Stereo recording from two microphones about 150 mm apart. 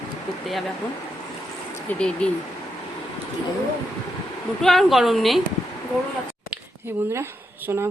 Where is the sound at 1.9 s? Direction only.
5° left (ahead or behind).